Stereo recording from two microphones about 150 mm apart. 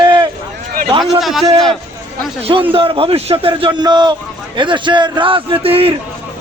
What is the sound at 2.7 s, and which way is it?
A man's voice, 35° right (ahead or behind).